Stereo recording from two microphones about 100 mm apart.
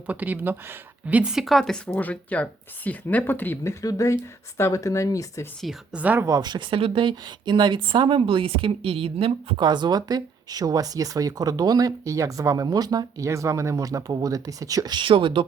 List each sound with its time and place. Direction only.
0.1 s speech: 15° right (ahead or behind); by 5.5 s 35° left (ahead or behind)
5.6 s a woman's voice: 10° right (ahead or behind)
6.2 s speech: 40° right (ahead or behind); by 9.6 s 70° right (ahead or behind)
9.6 s speech: 50° right (ahead or behind)
14.9 s speech: 55° right (ahead or behind)